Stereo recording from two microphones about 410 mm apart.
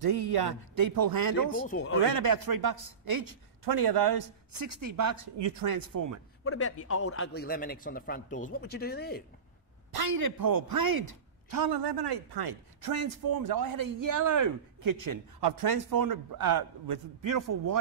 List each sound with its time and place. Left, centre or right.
0.0 s a man's voice: right
6.4 s a man's voice: left
9.9 s a man's voice: right